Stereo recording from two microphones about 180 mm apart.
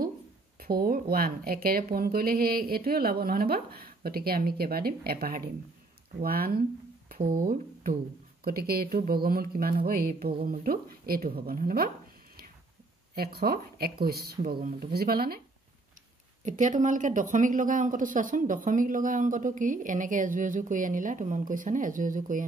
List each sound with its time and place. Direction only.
0.6 s speech: 55° right (ahead or behind)
13.1 s speech: 60° right (ahead or behind)
16.4 s speech: 45° right (ahead or behind)